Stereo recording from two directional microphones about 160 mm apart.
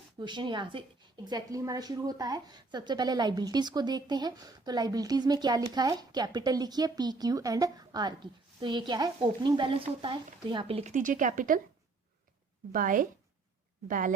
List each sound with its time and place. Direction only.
0.2 s a woman's voice: 30° right (ahead or behind)
10.9 s speech: 55° right (ahead or behind)
12.7 s speech: 55° right (ahead or behind)